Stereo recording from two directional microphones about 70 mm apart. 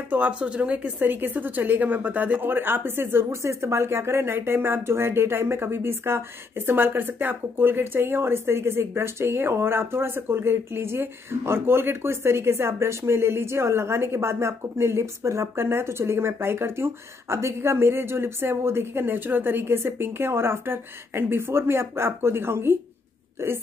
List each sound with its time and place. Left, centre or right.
0.1 s a woman's voice: centre; by 23.5 s right